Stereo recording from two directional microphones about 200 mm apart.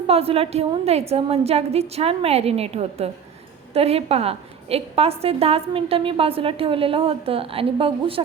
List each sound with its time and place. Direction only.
0.1 s a woman's voice: 30° right (ahead or behind)